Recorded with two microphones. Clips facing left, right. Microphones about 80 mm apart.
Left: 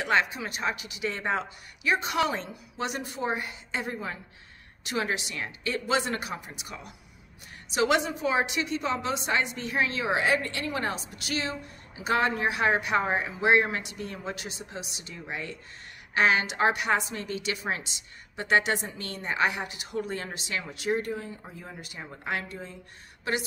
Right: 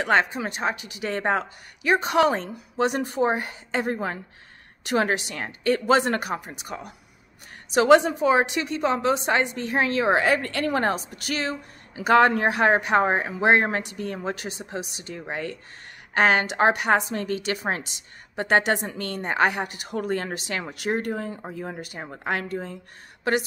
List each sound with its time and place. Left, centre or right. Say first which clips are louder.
0.0 s a woman's voice: right 4 dB; right